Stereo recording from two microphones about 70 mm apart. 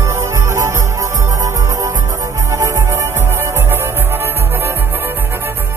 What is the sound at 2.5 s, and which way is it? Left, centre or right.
Music, right.